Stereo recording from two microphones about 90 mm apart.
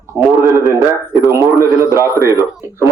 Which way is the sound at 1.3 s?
30° right (ahead or behind).